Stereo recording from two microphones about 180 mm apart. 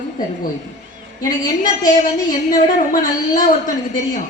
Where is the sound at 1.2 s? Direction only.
45° left (ahead or behind).